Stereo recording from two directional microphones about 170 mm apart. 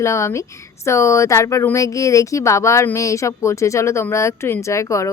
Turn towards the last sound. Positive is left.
turn(degrees=20)  # may be behind; listen again after turning